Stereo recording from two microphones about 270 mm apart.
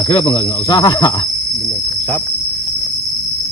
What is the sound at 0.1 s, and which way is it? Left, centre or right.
Cricket, centre.